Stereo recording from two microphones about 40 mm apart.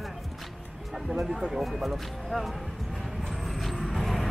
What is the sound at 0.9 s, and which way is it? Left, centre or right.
Speech, centre.